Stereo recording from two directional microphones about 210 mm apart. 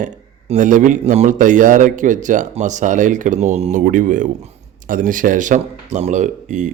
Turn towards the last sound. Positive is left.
turn(degrees=-35)  # may be behind; listen again after turning